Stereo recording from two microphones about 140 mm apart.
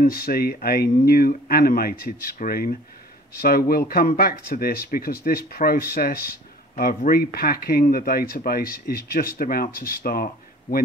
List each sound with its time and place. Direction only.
0.0 s speech: 90° left